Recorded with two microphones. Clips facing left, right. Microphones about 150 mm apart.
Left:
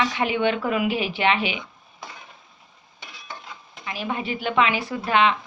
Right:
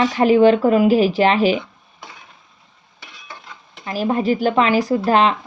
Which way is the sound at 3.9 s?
40° right (ahead or behind).